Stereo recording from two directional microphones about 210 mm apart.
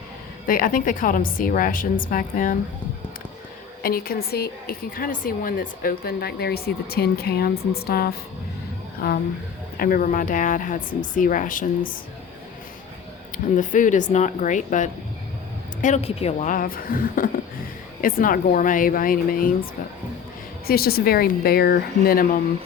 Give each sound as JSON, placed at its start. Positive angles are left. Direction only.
{"t": 0.4, "sound": "a woman's voice", "side_deg": 40}
{"t": 3.8, "sound": "speech", "side_deg": 45}
{"t": 9.7, "sound": "a woman's voice", "side_deg": 45}
{"t": 13.3, "sound": "a woman's voice", "side_deg": 40}
{"t": 20.7, "sound": "speech", "side_deg": 45}